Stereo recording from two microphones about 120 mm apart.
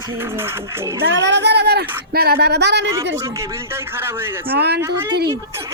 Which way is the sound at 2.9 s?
25° right (ahead or behind).